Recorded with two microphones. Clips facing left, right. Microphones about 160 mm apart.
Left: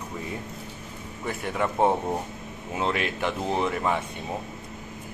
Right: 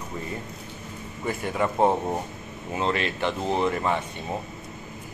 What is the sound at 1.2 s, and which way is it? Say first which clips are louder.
Speech: right 2 dB; centre (ahead or behind).